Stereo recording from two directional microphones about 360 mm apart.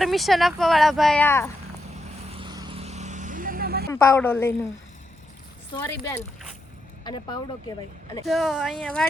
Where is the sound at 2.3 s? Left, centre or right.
Centre.